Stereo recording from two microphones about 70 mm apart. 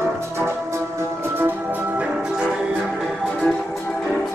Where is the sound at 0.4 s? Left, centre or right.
Right.